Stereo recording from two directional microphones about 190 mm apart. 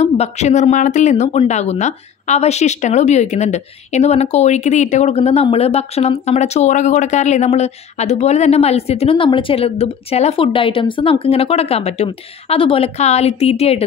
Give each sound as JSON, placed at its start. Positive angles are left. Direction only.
{"t": 0.0, "sound": "speech", "side_deg": 35}